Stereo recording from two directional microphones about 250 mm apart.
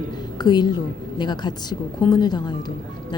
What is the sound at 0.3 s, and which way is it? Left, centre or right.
A woman's voice, centre.